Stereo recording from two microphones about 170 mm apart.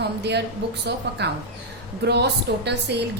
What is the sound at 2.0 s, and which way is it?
A woman's voice, 80° right.